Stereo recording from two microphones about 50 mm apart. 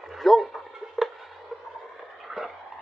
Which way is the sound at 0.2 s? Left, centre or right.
Centre.